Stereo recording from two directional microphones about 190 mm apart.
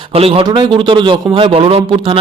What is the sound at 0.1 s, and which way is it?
A man's voice, 30° right (ahead or behind).